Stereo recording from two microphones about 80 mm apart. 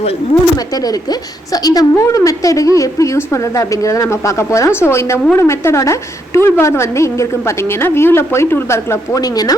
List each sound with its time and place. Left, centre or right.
1.5 s a woman's voice: left
9.2 s speech: left